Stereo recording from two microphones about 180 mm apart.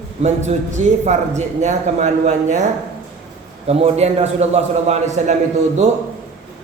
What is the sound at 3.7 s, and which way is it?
A man's voice, 35° right (ahead or behind).